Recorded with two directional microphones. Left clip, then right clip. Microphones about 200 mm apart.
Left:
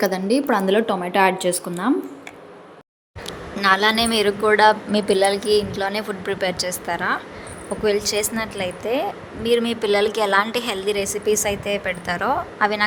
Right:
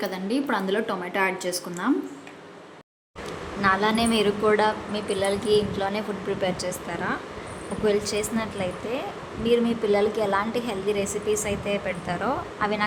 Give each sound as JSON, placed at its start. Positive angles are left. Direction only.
{"t": 0.0, "sound": "a woman's voice", "side_deg": 20}
{"t": 3.6, "sound": "a woman's voice", "side_deg": 45}